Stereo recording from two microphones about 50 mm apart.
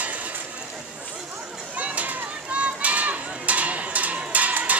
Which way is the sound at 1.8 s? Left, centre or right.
Right.